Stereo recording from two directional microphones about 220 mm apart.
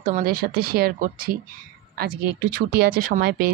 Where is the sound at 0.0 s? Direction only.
40° right (ahead or behind).